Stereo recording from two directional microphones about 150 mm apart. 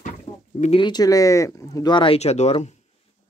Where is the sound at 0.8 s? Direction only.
30° left (ahead or behind); by 2.7 s 50° left (ahead or behind).